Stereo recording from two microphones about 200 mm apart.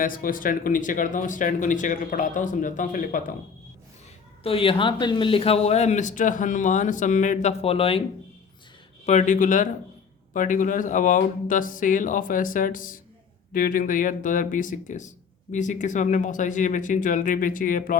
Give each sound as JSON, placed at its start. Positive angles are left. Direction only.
{"t": 0.0, "sound": "speech", "side_deg": 45}
{"t": 4.4, "sound": "speech", "side_deg": 25}
{"t": 9.0, "sound": "speech", "side_deg": 35}